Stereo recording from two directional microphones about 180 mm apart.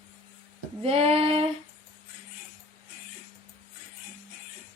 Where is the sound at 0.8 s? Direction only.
35° right (ahead or behind).